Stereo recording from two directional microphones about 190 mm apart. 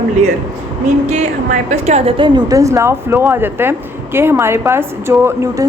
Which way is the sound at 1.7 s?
35° right (ahead or behind).